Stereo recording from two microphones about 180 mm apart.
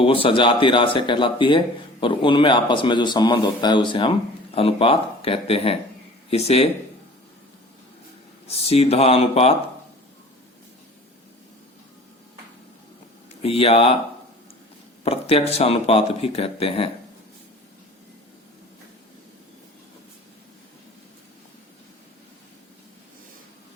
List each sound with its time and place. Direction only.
0.0 s speech: 30° left (ahead or behind)
8.4 s speech: 35° left (ahead or behind)
13.4 s speech: 35° left (ahead or behind)
15.0 s speech: 35° left (ahead or behind)